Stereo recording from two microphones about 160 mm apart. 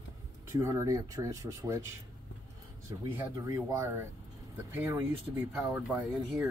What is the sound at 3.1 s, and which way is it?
Speech, 15° right (ahead or behind).